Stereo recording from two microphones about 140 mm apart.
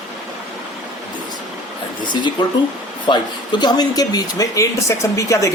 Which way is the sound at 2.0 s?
35° left (ahead or behind).